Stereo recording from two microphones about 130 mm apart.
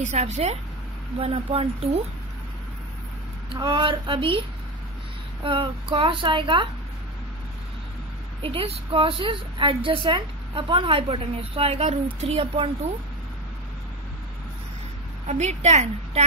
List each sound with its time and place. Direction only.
0.0 s a woman's voice: 65° right (ahead or behind); by 2.0 s 50° right (ahead or behind)
3.4 s a woman's voice: 35° right (ahead or behind)
8.4 s a woman's voice: 45° right (ahead or behind)
15.2 s a woman's voice: 60° right (ahead or behind)